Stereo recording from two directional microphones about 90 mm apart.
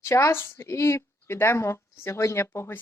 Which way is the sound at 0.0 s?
35° left (ahead or behind).